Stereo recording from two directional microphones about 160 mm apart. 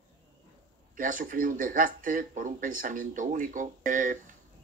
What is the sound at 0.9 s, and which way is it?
Speech, 60° right (ahead or behind).